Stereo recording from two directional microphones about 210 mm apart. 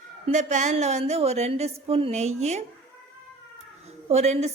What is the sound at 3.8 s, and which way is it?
Cat, 30° right (ahead or behind).